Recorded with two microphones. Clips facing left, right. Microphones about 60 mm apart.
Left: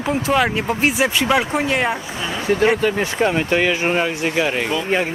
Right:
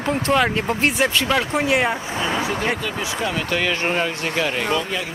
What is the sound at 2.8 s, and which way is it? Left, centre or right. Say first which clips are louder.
Speech: left 7 dB; left.